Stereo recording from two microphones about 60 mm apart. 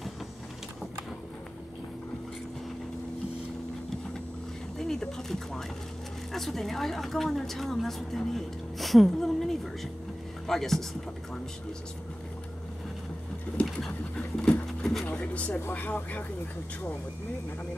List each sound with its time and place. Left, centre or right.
4.7 s a sound: centre
6.3 s a woman's voice: centre
10.4 s pigeon: centre
13.7 s pigeon: centre
14.7 s a sound: centre
15.0 s speech: left